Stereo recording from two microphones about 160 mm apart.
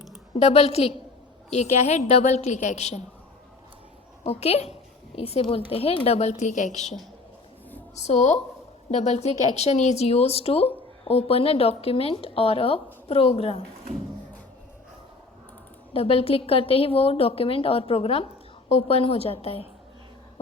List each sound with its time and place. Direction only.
0.3 s a child's voice: 40° left (ahead or behind)
4.2 s a child's voice: 40° left (ahead or behind)
7.9 s a woman's voice: 45° left (ahead or behind)
15.9 s a child's voice: 35° left (ahead or behind)